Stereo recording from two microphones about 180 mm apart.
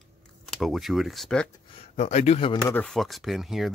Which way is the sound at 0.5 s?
Centre (ahead or behind).